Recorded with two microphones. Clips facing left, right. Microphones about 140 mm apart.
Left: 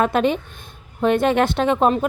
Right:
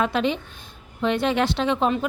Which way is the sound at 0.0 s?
50° left (ahead or behind).